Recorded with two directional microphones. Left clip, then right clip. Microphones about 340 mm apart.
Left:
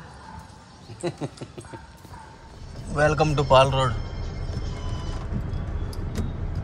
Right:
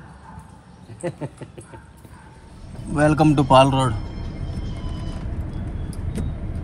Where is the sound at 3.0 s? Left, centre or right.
Centre.